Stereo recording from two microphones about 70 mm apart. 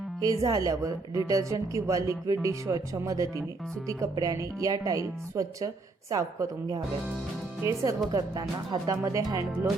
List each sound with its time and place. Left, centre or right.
0.2 s a woman's voice: right
4.1 s speech: right
4.4 s speech: right
7.6 s a woman's voice: right
8.1 s speech: right
9.0 s a woman's voice: right